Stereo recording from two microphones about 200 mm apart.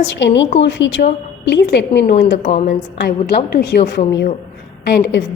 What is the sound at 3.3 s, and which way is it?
A woman's voice, 50° left (ahead or behind).